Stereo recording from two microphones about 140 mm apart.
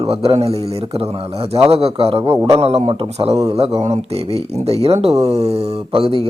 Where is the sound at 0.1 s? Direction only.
45° right (ahead or behind).